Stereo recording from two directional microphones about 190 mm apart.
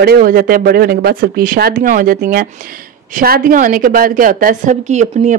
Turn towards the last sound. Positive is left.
turn(degrees=-40)  # may be behind; listen again after turning